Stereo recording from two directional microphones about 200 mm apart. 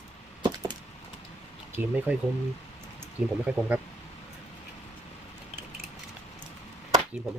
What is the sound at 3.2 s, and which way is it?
Speech, 5° right (ahead or behind).